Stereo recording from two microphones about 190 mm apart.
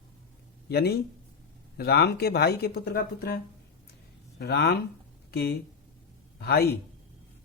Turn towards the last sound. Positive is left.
turn(degrees=55)  # may be behind; listen again after turning